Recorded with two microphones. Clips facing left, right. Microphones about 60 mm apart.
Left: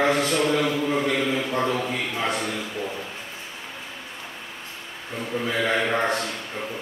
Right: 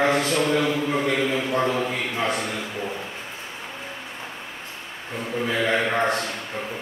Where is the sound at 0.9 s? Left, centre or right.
Centre.